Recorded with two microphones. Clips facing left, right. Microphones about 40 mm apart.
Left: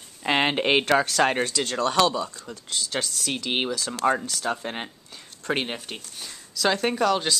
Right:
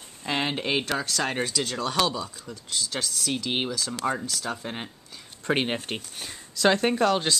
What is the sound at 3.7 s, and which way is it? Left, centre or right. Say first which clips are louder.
Speech: left 1 dB; centre.